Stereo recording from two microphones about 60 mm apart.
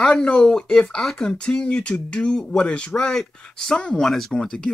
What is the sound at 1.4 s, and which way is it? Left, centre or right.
Speech, centre.